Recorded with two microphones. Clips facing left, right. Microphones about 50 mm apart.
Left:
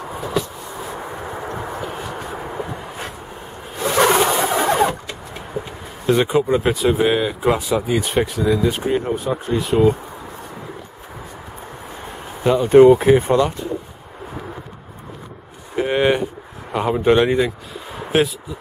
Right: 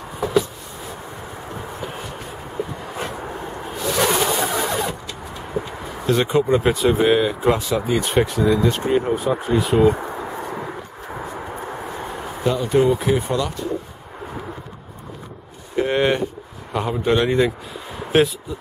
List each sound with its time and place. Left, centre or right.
3.8 s a sound: left
4.3 s vehicle: centre
4.6 s vehicle: left
6.0 s speech: centre
12.4 s speech: left
15.7 s speech: centre
18.1 s speech: centre